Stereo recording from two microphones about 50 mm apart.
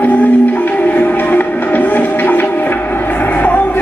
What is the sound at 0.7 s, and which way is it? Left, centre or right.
Music, left.